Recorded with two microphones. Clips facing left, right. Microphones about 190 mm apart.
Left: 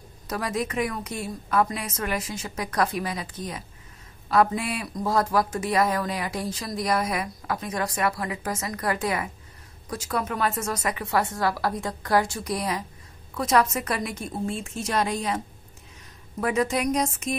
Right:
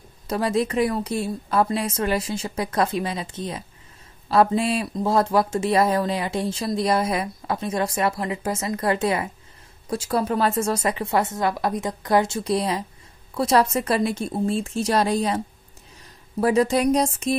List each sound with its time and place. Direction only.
0.3 s a woman's voice: 30° right (ahead or behind)